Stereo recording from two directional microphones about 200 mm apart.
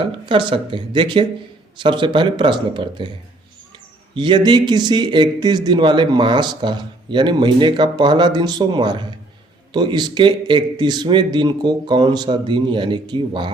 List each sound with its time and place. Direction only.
0.0 s speech: 25° right (ahead or behind)
4.1 s speech: 25° right (ahead or behind)